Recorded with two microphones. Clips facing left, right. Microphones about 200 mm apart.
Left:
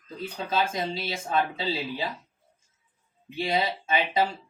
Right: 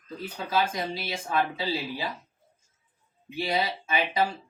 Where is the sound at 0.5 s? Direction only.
25° left (ahead or behind).